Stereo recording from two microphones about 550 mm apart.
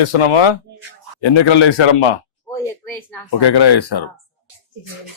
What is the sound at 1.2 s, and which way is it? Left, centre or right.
Speech, left.